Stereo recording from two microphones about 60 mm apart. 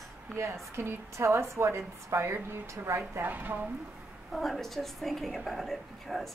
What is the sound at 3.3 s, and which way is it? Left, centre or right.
Speech, right.